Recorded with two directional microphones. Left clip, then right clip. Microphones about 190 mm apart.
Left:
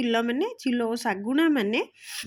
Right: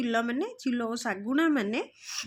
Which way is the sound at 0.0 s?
15° left (ahead or behind).